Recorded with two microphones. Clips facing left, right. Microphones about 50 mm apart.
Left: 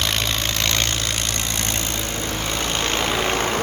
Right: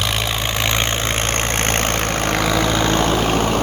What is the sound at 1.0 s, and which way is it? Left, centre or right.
Vehicle, right.